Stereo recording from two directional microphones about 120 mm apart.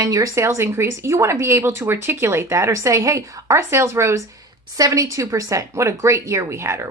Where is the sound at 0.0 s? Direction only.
30° right (ahead or behind).